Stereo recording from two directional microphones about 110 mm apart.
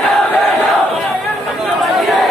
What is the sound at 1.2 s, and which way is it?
Chatter, centre (ahead or behind).